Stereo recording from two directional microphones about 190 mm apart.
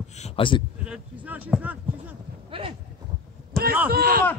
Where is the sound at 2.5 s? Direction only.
30° right (ahead or behind).